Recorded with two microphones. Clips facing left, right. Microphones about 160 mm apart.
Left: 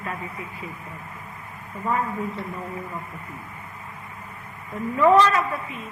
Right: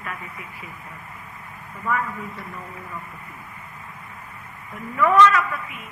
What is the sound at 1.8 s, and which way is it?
Speech, 30° left (ahead or behind).